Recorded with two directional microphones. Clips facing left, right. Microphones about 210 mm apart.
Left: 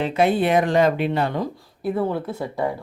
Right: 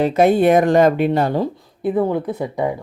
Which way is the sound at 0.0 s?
45° right (ahead or behind).